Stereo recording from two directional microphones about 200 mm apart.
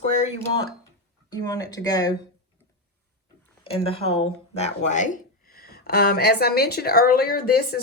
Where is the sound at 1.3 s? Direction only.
20° left (ahead or behind).